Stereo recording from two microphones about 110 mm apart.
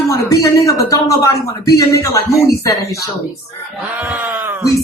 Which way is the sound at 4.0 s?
15° right (ahead or behind).